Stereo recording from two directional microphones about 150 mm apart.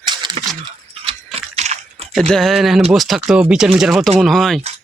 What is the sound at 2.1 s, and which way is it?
Speech, 5° left (ahead or behind).